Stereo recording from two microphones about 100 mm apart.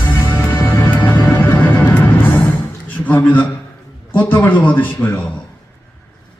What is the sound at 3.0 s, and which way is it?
A man's voice, 15° left (ahead or behind).